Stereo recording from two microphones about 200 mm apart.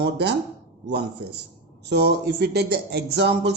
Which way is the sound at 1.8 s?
55° right (ahead or behind).